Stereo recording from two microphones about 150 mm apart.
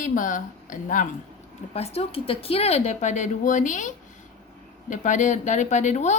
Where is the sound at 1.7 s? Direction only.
40° left (ahead or behind).